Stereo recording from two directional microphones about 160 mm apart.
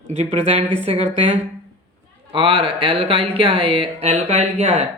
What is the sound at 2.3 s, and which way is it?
Speech, 35° right (ahead or behind).